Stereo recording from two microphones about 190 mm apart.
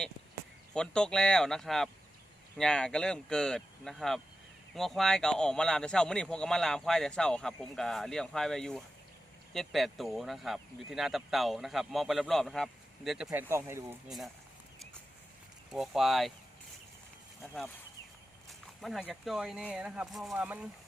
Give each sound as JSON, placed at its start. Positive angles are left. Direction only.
{"t": 0.7, "sound": "speech", "side_deg": 5}
{"t": 15.7, "sound": "speech", "side_deg": 0}
{"t": 17.4, "sound": "speech", "side_deg": 0}